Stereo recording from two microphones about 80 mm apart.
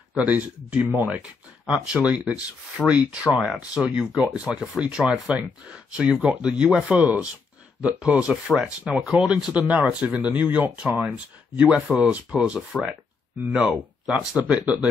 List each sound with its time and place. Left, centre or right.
0.3 s speech: centre
2.8 s speech: centre
3.5 s speech: centre
6.5 s speech: centre
12.5 s speech: centre